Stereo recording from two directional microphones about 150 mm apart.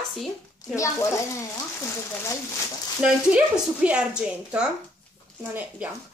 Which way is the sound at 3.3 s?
5° right (ahead or behind).